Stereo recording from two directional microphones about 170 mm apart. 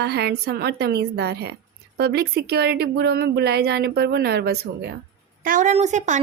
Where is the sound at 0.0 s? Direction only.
75° right (ahead or behind).